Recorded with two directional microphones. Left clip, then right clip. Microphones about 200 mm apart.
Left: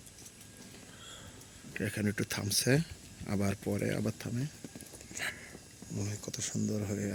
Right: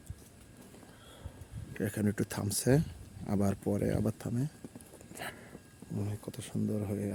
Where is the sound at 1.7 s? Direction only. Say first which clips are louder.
Right 1 dB; 20° right (ahead or behind).